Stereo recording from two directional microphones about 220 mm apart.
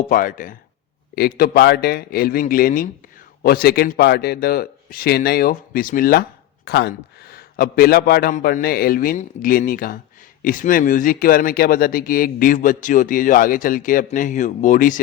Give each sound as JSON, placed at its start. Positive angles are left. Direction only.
{"t": 0.1, "sound": "a man's voice", "side_deg": 40}